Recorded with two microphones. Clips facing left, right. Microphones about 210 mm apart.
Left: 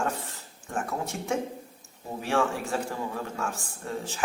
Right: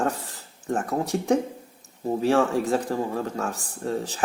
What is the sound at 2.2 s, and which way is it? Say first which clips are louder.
Speech: right 6 dB; 40° right (ahead or behind).